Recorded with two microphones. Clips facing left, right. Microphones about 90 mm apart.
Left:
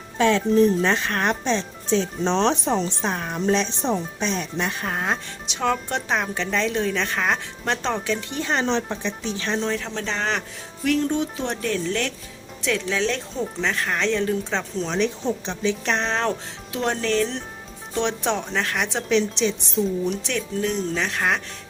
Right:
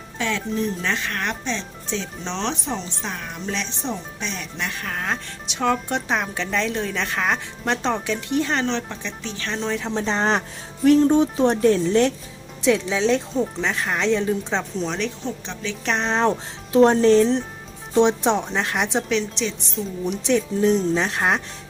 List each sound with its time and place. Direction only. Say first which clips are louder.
0.2 s speech: left 8 dB; 35° left (ahead or behind); by 5.2 s 15° left (ahead or behind)
5.5 s a woman's voice: right 2 dB; centre (ahead or behind)
8.5 s speech: left 1 dB; 15° left (ahead or behind)
9.6 s a woman's voice: right 4 dB; 5° right (ahead or behind)
9.9 s speech: right 5 dB; 25° right (ahead or behind)
10.8 s music: right 7 dB; 30° right (ahead or behind)
11.5 s speech: right 6 dB; 25° right (ahead or behind); by 14.9 s 10° right (ahead or behind)
14.9 s a woman's voice: left 4 dB; 5° left (ahead or behind); by 16.4 s 10° right (ahead or behind)
16.7 s speech: right 9 dB; 30° right (ahead or behind)
19.0 s a woman's voice: left 3 dB; centre (ahead or behind)
20.1 s speech: right 5 dB; 20° right (ahead or behind)